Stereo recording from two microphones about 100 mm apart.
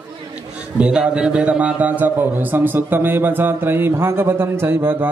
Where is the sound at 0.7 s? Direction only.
10° right (ahead or behind).